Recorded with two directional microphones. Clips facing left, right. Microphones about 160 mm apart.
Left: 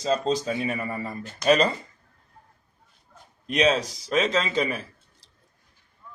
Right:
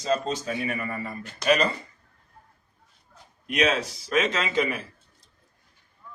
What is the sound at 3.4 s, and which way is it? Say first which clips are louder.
Speech: left 2 dB; 30° left (ahead or behind).